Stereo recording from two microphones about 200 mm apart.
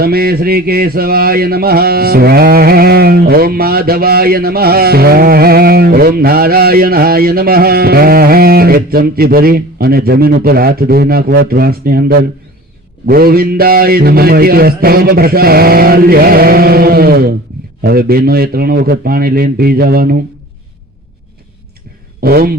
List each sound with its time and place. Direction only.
0.0 s mantra: 50° right (ahead or behind)
22.2 s mantra: 50° right (ahead or behind)